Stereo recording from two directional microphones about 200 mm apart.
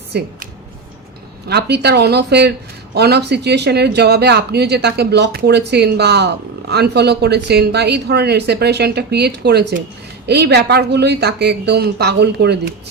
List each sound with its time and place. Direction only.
0.1 s speech: 55° right (ahead or behind)
1.5 s speech: 55° right (ahead or behind)